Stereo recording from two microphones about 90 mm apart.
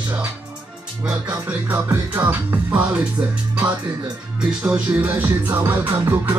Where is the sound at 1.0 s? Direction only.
20° right (ahead or behind).